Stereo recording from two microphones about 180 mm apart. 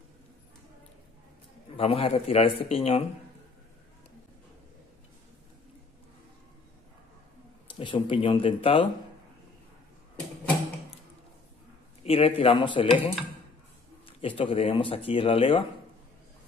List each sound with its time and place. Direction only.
1.8 s a man's voice: 30° left (ahead or behind)
7.6 s speech: 30° left (ahead or behind)
12.0 s speech: 30° left (ahead or behind)